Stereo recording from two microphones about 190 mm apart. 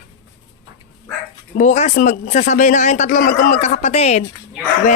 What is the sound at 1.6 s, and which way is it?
A man's voice, 35° left (ahead or behind).